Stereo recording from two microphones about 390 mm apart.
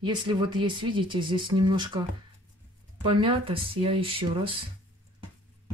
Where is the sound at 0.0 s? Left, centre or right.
Centre.